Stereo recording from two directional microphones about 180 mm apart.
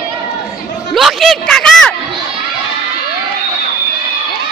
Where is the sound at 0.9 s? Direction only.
Centre (ahead or behind).